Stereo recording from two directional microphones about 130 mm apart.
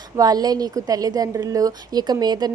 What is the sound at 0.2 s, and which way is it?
A woman's voice, 30° right (ahead or behind).